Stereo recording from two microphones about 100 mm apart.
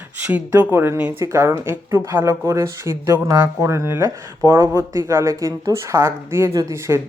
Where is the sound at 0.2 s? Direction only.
20° right (ahead or behind).